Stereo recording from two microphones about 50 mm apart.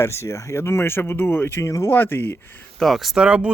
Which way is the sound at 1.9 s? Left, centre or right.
Left.